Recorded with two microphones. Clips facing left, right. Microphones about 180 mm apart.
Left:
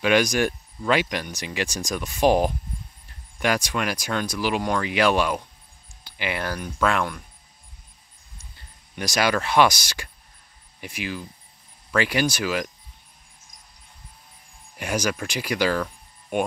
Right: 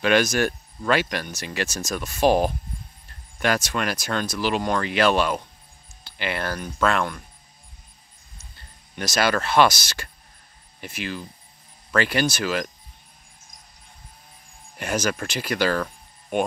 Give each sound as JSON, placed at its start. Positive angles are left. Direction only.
{"t": 0.0, "sound": "speech", "side_deg": 15}
{"t": 8.5, "sound": "speech", "side_deg": 15}
{"t": 14.8, "sound": "speech", "side_deg": 10}